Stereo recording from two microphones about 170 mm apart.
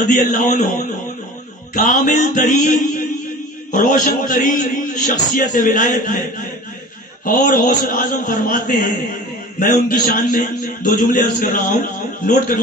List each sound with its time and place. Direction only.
0.0 s a man's voice: 50° left (ahead or behind)
1.7 s a man's voice: 50° left (ahead or behind)
3.7 s a man's voice: 50° left (ahead or behind)
7.2 s a man's voice: 55° left (ahead or behind)